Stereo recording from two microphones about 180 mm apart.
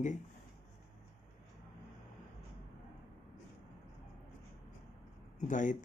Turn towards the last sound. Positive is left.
turn(degrees=45)  # may be behind; listen again after turning